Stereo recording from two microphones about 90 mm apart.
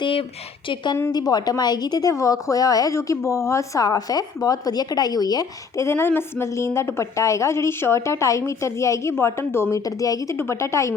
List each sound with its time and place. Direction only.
0.0 s speech: 85° left
1.1 s a woman's voice: 45° left (ahead or behind); by 9.6 s 30° left (ahead or behind)
9.7 s a woman's voice: 40° left (ahead or behind)
10.3 s a woman's voice: 30° left (ahead or behind)